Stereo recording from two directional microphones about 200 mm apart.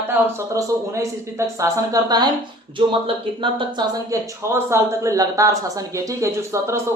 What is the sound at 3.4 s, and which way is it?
Speech, 25° right (ahead or behind).